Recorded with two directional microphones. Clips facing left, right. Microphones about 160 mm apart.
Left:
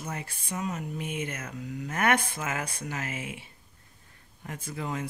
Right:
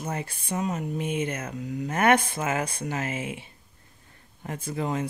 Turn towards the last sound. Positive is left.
turn(degrees=-30)  # may be behind; listen again after turning